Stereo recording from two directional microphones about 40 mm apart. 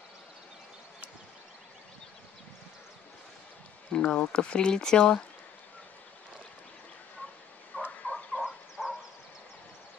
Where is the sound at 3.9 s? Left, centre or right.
Centre.